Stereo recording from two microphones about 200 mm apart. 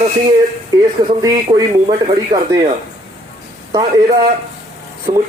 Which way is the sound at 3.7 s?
20° right (ahead or behind).